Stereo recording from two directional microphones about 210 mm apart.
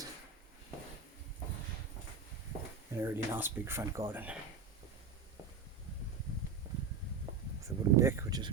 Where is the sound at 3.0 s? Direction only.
10° right (ahead or behind).